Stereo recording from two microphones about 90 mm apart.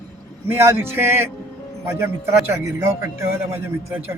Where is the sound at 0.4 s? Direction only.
25° right (ahead or behind).